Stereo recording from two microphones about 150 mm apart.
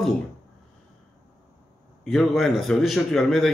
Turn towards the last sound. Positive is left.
turn(degrees=0)  # may be behind; listen again after turning